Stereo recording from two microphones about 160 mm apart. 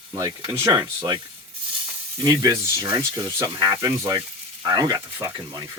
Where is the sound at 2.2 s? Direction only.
25° right (ahead or behind).